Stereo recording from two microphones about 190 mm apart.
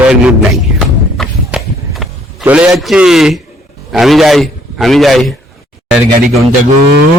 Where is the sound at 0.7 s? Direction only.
Centre (ahead or behind).